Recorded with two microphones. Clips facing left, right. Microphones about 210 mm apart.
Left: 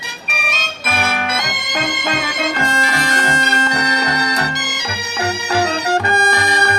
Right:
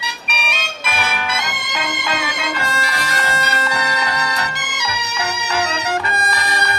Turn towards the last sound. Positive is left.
turn(degrees=45)  # may be behind; listen again after turning